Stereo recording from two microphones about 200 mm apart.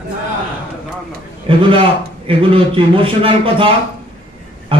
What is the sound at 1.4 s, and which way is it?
A man's voice, 25° right (ahead or behind).